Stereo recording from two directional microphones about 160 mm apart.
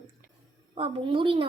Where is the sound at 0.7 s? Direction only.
35° right (ahead or behind).